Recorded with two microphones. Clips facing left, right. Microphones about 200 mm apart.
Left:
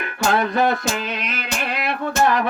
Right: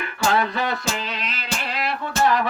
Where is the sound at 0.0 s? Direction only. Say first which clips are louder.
Left 2 dB; 50° left (ahead or behind).